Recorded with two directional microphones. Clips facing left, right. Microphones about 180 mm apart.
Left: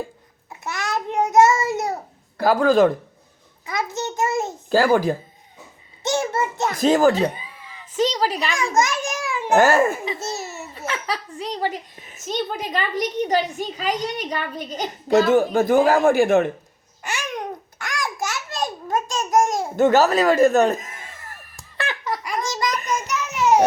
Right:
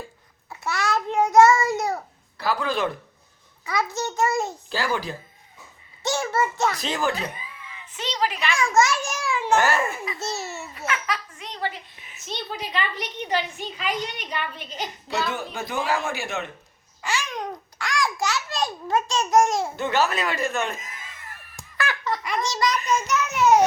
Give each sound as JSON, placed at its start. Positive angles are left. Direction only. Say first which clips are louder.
{"t": 0.6, "sound": "child singing", "louder": "right 1 dB", "side_deg": 20}
{"t": 2.4, "sound": "speech", "louder": "left 9 dB", "side_deg": 45}
{"t": 3.7, "sound": "a child's voice", "louder": "even", "side_deg": 20}
{"t": 4.7, "sound": "speech", "louder": "left 12 dB", "side_deg": 50}
{"t": 6.0, "sound": "a sound", "louder": "left 2 dB", "side_deg": 20}
{"t": 6.7, "sound": "speech", "louder": "left 10 dB", "side_deg": 45}
{"t": 7.2, "sound": "a woman's voice", "louder": "left 10 dB", "side_deg": 30}
{"t": 8.7, "sound": "a child's voice", "louder": "right 1 dB", "side_deg": 20}
{"t": 9.6, "sound": "speech", "louder": "left 7 dB", "side_deg": 45}
{"t": 17.4, "sound": "babbling", "louder": "left 1 dB", "side_deg": 20}
{"t": 19.2, "sound": "speech", "louder": "left 1 dB", "side_deg": 15}
{"t": 19.7, "sound": "speech", "louder": "left 8 dB", "side_deg": 45}
{"t": 22.0, "sound": "a child's voice", "louder": "left 2 dB", "side_deg": 15}
{"t": 23.1, "sound": "child singing", "louder": "left 1 dB", "side_deg": 10}